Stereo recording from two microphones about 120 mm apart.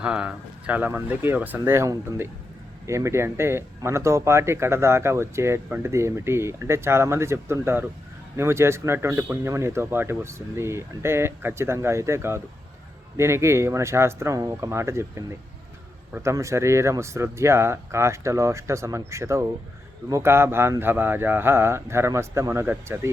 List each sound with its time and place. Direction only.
0.0 s speech: 10° right (ahead or behind)